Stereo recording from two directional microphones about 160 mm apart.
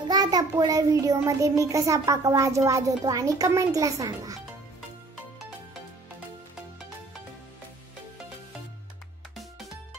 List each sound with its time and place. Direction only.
0.1 s a child's voice: 25° right (ahead or behind)
9.3 s music: centre (ahead or behind)